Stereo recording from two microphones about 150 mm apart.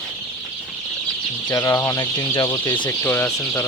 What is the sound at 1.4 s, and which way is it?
Speech, 20° left (ahead or behind).